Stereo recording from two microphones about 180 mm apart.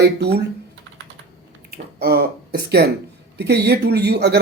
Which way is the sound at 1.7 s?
60° right (ahead or behind).